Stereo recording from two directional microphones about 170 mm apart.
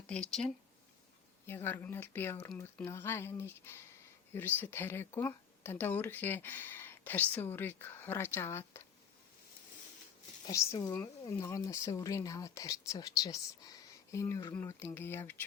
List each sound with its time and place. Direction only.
0.1 s speech: 5° left (ahead or behind)
10.4 s speech: 20° left (ahead or behind)